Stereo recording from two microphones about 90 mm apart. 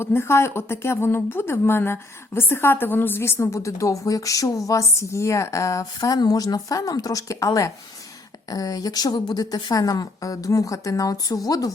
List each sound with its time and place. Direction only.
0.0 s a woman's voice: 25° left (ahead or behind); by 11.7 s 45° left (ahead or behind)